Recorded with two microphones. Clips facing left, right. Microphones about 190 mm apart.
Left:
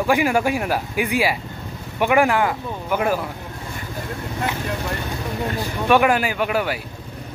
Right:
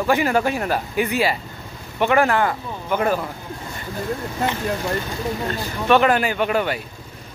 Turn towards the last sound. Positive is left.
turn(degrees=5)  # may be behind; listen again after turning